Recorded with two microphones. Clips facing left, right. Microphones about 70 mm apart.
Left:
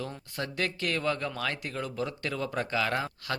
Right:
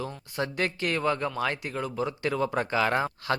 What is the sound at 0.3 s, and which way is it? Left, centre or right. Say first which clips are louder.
Speech: right 4 dB; right.